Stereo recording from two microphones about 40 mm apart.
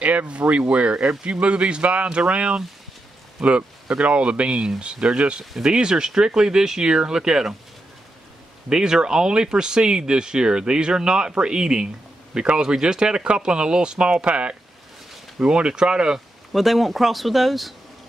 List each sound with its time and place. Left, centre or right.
0.0 s speech: right
4.6 s speech: centre
8.6 s speech: centre
16.5 s speech: centre